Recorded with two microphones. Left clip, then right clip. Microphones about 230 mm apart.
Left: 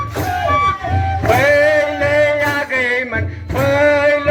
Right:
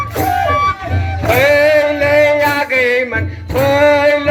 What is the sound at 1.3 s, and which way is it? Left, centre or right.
Male singing, right.